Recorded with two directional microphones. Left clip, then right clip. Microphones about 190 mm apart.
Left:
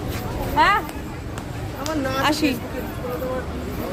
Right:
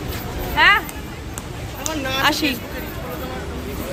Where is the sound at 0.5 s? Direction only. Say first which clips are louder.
Right 3 dB; 15° left (ahead or behind).